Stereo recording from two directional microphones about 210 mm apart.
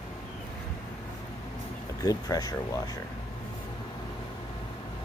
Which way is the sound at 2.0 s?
15° left (ahead or behind).